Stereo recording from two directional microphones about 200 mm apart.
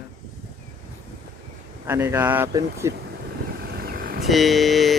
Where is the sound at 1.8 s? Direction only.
10° right (ahead or behind).